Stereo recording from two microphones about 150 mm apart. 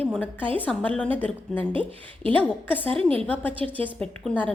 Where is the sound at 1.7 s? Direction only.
35° right (ahead or behind).